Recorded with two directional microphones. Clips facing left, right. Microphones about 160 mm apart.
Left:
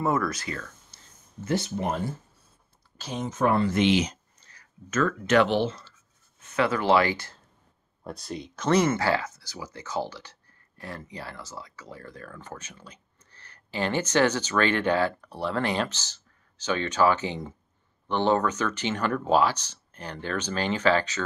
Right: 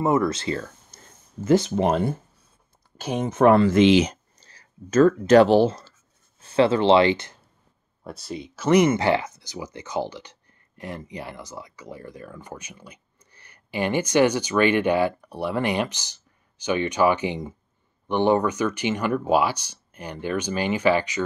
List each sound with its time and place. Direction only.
0.0 s speech: 20° right (ahead or behind)
1.4 s speech: 90° right; by 2.1 s 75° right (ahead or behind)
3.0 s speech: 60° right (ahead or behind); by 4.2 s 80° right
4.4 s speech: 30° right (ahead or behind)
6.4 s speech: 30° right (ahead or behind)
8.0 s speech: centre (ahead or behind)
8.6 s speech: 15° right (ahead or behind)